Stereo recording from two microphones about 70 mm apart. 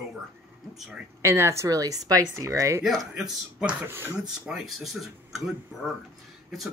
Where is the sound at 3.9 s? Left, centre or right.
Right.